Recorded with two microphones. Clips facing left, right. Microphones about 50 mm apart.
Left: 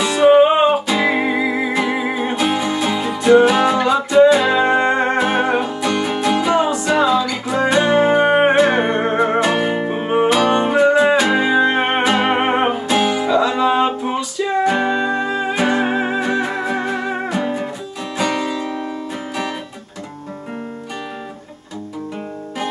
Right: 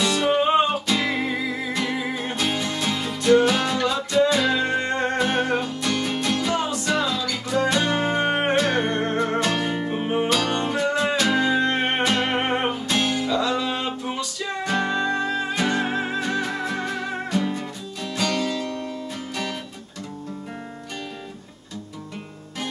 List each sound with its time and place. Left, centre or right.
0.0 s music: centre
1.7 s music: centre; by 10.2 s left
10.2 s music: left